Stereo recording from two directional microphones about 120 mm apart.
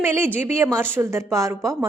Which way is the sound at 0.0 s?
20° right (ahead or behind).